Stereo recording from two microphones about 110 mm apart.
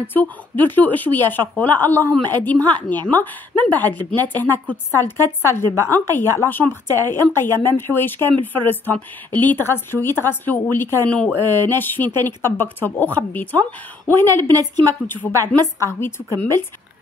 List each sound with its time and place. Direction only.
0.0 s speech: 20° left (ahead or behind)
14.5 s a woman's voice: 35° right (ahead or behind)
15.2 s a woman's voice: centre (ahead or behind)
15.8 s speech: 25° left (ahead or behind)